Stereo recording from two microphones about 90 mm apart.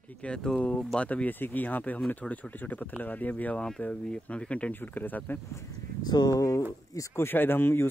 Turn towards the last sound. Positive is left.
turn(degrees=25)  # may be behind; listen again after turning